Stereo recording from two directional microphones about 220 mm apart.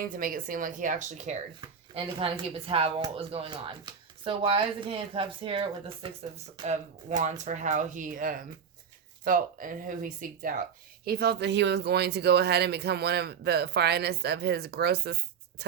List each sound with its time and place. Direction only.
0.0 s speech: 40° right (ahead or behind)